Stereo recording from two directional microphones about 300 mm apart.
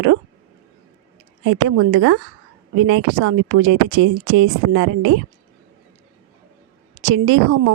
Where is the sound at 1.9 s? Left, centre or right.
Right.